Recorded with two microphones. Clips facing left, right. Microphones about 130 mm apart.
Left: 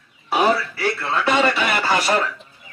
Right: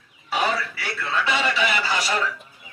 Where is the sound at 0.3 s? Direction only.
45° left (ahead or behind).